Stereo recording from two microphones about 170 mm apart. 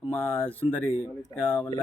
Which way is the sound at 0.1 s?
10° left (ahead or behind).